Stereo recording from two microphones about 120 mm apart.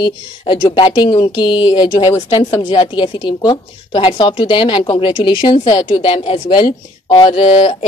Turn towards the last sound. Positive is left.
turn(degrees=50)  # may be behind; listen again after turning